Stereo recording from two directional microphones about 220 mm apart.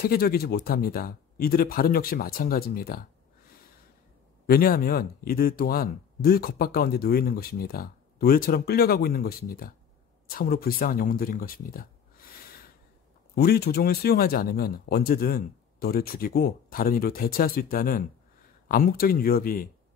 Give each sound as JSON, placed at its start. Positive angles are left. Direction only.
{"t": 0.0, "sound": "speech", "side_deg": 45}
{"t": 4.5, "sound": "speech", "side_deg": 40}
{"t": 13.3, "sound": "speech", "side_deg": 45}